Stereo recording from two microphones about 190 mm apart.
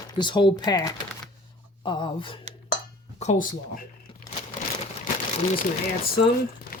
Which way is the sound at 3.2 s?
40° left (ahead or behind).